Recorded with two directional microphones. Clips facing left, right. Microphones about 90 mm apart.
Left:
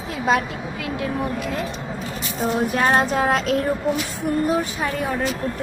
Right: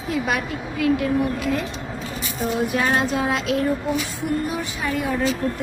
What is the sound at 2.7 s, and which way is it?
Speech, 40° left (ahead or behind).